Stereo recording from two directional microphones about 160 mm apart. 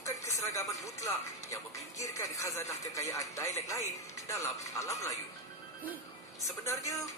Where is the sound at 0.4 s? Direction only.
20° left (ahead or behind).